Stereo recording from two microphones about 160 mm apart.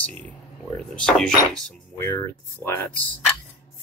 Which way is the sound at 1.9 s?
15° left (ahead or behind).